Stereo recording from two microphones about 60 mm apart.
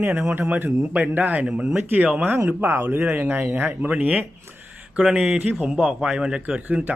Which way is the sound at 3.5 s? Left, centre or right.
Right.